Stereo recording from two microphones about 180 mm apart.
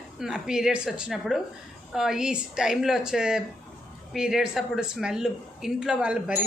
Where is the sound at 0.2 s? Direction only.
5° right (ahead or behind).